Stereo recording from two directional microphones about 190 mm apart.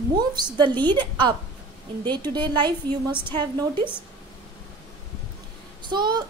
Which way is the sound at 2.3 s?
25° right (ahead or behind).